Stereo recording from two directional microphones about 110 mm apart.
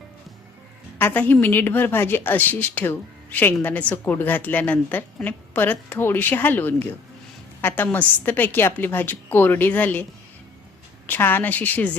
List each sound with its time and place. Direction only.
0.9 s a woman's voice: 15° left (ahead or behind)
7.9 s a woman's voice: 20° left (ahead or behind)